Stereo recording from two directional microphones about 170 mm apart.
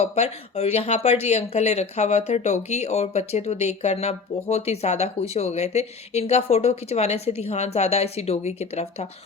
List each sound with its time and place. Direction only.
0.0 s speech: 40° left (ahead or behind)